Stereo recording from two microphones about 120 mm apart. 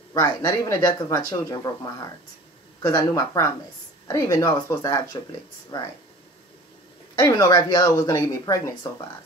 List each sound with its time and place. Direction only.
0.1 s speech: 30° left (ahead or behind)
7.2 s speech: 30° left (ahead or behind)